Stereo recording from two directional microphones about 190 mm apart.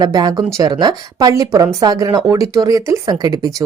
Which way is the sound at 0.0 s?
20° right (ahead or behind).